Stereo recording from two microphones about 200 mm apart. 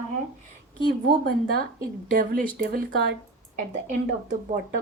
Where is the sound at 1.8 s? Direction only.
45° right (ahead or behind).